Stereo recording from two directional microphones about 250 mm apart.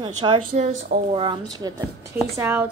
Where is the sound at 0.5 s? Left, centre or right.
Right; by 2.7 s centre.